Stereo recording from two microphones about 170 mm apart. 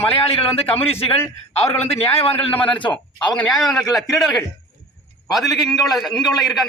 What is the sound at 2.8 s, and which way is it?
Speech, 30° left (ahead or behind).